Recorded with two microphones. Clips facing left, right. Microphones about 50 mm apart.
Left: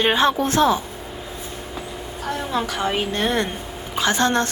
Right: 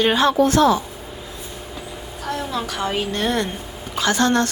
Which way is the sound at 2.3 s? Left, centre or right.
Centre.